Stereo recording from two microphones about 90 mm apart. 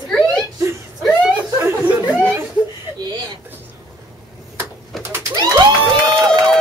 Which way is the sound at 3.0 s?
45° right (ahead or behind).